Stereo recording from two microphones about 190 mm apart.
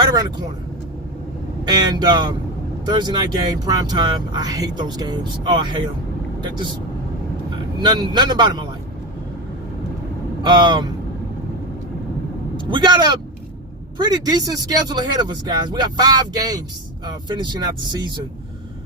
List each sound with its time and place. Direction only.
0.0 s vehicle: 20° right (ahead or behind)
1.6 s speech: 20° right (ahead or behind)
7.8 s speech: 20° right (ahead or behind)
10.4 s speech: 25° right (ahead or behind)
12.5 s vehicle: 25° right (ahead or behind)
14.3 s speech: 20° right (ahead or behind)